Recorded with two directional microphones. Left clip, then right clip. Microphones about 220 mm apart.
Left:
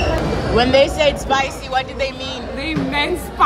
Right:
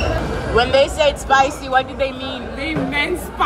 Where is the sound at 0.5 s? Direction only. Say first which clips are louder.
Left 1 dB; centre (ahead or behind).